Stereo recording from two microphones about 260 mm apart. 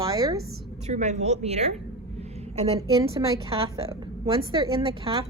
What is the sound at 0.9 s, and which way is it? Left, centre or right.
A woman's voice, right.